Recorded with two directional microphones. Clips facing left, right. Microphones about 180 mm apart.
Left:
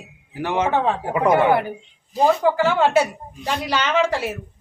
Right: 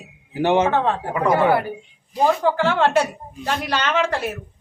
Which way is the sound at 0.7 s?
10° left (ahead or behind).